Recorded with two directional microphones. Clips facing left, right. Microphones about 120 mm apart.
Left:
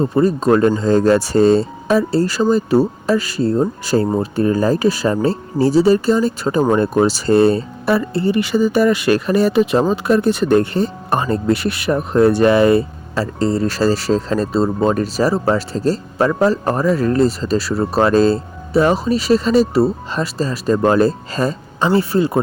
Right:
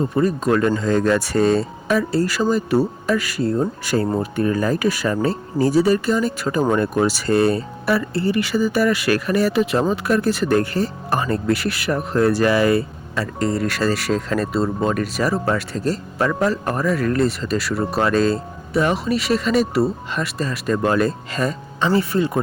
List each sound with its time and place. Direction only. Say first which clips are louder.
0.0 s speech: left 4 dB; 30° left (ahead or behind)